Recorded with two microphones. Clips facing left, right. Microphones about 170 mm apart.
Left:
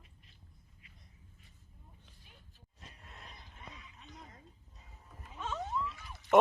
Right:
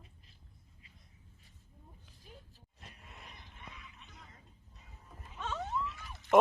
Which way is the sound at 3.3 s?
30° left (ahead or behind).